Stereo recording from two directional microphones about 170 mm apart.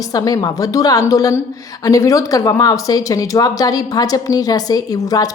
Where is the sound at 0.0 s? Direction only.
20° left (ahead or behind).